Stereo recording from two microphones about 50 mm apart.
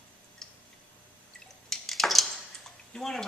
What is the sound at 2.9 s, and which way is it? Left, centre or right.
Speech, centre.